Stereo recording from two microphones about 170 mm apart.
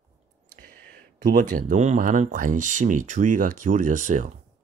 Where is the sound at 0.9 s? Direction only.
50° right (ahead or behind).